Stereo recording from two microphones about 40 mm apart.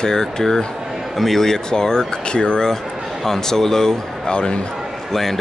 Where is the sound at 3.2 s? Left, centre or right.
Centre.